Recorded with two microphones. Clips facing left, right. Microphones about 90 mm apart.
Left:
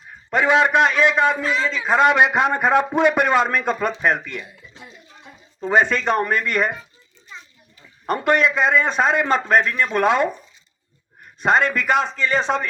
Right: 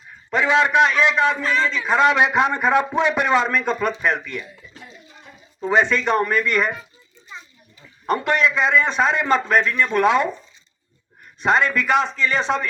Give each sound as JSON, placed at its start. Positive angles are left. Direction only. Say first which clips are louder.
{"t": 0.3, "sound": "a man's voice", "louder": "left 1 dB", "side_deg": 45}
{"t": 5.6, "sound": "a man's voice", "louder": "even", "side_deg": 45}
{"t": 8.0, "sound": "a man's voice", "louder": "left 1 dB", "side_deg": 45}
{"t": 11.3, "sound": "a man's voice", "louder": "even", "side_deg": 45}